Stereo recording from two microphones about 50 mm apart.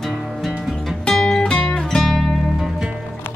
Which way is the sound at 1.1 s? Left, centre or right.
Centre.